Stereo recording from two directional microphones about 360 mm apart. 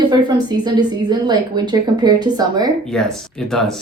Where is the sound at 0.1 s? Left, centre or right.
Centre.